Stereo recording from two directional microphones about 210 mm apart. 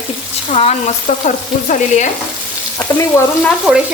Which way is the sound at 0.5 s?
30° left (ahead or behind).